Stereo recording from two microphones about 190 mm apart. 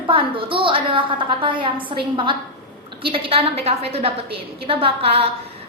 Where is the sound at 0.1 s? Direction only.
25° right (ahead or behind).